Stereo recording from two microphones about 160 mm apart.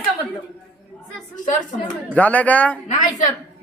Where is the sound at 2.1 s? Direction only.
10° left (ahead or behind).